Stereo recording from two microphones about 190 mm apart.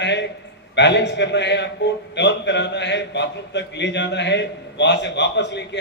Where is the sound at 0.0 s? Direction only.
65° left (ahead or behind).